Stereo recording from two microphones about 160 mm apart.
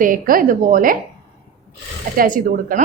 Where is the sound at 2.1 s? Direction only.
60° right (ahead or behind).